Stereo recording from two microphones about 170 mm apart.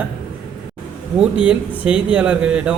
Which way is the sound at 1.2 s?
5° right (ahead or behind).